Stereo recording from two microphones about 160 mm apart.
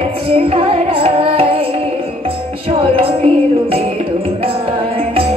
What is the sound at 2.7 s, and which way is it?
Music, 35° right (ahead or behind).